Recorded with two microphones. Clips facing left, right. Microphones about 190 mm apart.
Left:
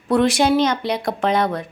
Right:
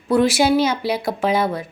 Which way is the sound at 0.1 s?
5° right (ahead or behind).